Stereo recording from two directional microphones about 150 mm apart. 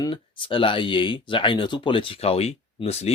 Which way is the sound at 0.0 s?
30° left (ahead or behind).